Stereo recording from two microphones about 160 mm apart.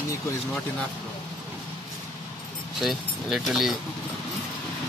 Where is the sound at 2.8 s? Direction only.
Centre (ahead or behind).